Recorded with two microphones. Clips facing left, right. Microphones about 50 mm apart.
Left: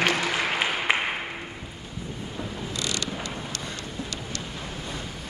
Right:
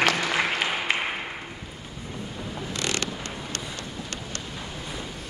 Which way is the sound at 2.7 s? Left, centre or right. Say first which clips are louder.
Right 2 dB; right.